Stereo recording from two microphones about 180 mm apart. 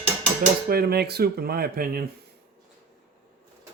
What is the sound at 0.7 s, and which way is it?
Speech, 60° right (ahead or behind).